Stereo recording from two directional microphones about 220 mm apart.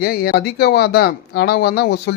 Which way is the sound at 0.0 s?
45° left (ahead or behind).